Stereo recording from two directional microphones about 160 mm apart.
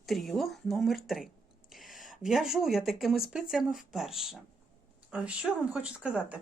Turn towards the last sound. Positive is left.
turn(degrees=-5)  # may be behind; listen again after turning